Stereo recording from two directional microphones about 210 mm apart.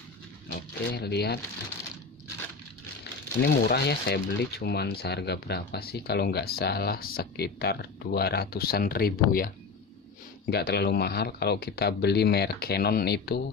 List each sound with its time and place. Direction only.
0.5 s speech: 50° left (ahead or behind)
3.0 s speech: 50° left (ahead or behind)
10.5 s speech: 50° left (ahead or behind)